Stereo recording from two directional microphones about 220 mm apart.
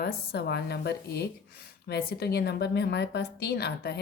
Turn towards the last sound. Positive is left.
turn(degrees=45)  # may be behind; listen again after turning